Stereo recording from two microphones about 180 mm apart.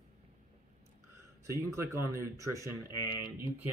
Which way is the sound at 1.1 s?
15° right (ahead or behind).